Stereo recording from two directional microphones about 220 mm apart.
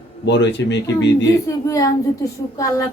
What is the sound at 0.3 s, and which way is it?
Speech, 55° left (ahead or behind).